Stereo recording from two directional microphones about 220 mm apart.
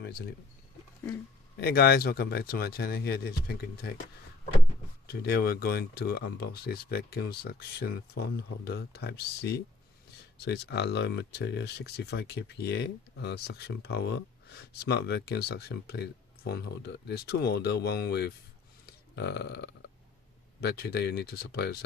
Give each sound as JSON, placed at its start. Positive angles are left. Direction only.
{"t": 0.0, "sound": "speech", "side_deg": 40}
{"t": 1.6, "sound": "speech", "side_deg": 45}
{"t": 5.0, "sound": "speech", "side_deg": 45}